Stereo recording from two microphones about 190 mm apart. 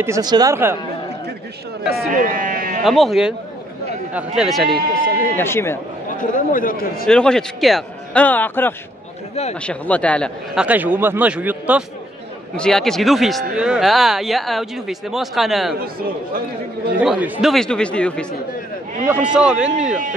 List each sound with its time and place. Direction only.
0.0 s a man's voice: 20° right (ahead or behind)
2.0 s speech: 45° right (ahead or behind)
2.8 s speech: centre (ahead or behind)
4.4 s speech: centre (ahead or behind)
5.3 s speech: 15° left (ahead or behind)
6.1 s speech: 45° left (ahead or behind)
7.1 s speech: 5° left (ahead or behind)
9.3 s a man's voice: 35° left (ahead or behind)
9.6 s speech: 5° left (ahead or behind)
10.6 s a man's voice: 10° right (ahead or behind)
15.8 s speech: 50° right (ahead or behind)
17.0 s speech: centre (ahead or behind)
19.0 s speech: 5° right (ahead or behind)